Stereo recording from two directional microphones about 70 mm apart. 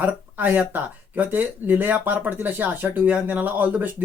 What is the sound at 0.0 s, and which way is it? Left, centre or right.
Speech, right.